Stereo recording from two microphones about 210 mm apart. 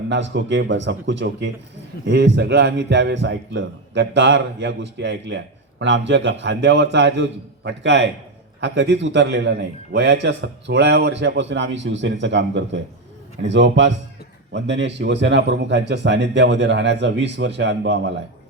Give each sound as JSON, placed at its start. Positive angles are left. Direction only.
{"t": 0.1, "sound": "a man's voice", "side_deg": -60}